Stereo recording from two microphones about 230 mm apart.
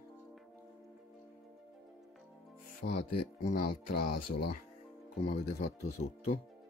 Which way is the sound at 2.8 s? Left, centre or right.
Left.